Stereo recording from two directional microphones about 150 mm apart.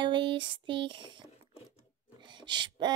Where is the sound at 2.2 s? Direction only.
30° right (ahead or behind).